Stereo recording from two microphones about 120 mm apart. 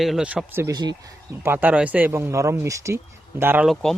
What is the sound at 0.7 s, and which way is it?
Speech, 35° right (ahead or behind).